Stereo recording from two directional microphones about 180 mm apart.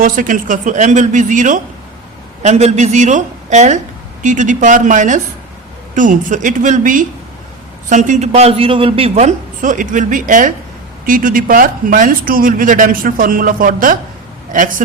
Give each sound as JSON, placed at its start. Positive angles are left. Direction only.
{"t": 0.0, "sound": "a woman's voice", "side_deg": -50}